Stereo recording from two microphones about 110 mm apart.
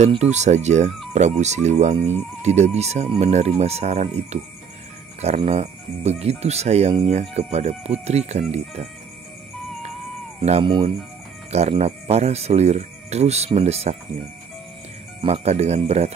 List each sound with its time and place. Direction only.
0.2 s speech: 90° right
10.6 s speech: 50° right (ahead or behind)
11.8 s speech: 75° right (ahead or behind)
13.5 s speech: 65° right (ahead or behind)
15.2 s speech: 70° right (ahead or behind)